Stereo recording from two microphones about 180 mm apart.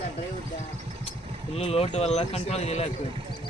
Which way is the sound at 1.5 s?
35° left (ahead or behind).